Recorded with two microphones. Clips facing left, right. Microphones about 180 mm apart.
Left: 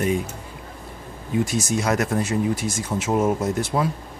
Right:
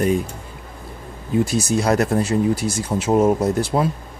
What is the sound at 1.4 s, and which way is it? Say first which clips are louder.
Speech: right 4 dB; 35° right (ahead or behind).